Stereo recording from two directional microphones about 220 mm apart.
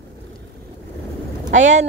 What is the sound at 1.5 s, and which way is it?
Speech, 35° right (ahead or behind).